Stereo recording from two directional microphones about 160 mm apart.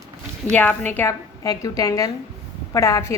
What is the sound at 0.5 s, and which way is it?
A woman's voice, 10° left (ahead or behind).